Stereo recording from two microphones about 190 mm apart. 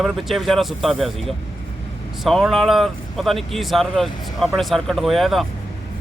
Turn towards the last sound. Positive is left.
turn(degrees=0)  # may be behind; listen again after turning